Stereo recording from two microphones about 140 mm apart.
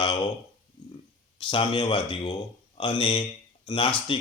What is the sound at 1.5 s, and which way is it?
Speech, 35° left (ahead or behind).